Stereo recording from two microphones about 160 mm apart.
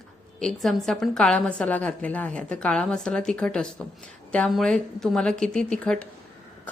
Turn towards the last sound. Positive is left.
turn(degrees=5)  # may be behind; listen again after turning